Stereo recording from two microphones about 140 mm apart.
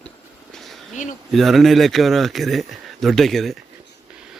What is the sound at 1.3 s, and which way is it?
Speech, centre (ahead or behind).